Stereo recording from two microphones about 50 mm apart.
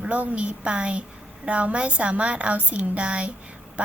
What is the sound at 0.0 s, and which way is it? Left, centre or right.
A woman's voice, right.